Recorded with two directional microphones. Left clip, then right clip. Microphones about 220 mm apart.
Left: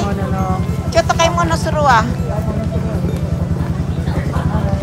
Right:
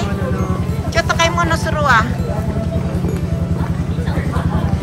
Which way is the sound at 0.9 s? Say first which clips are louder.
Left 2 dB; 20° left (ahead or behind).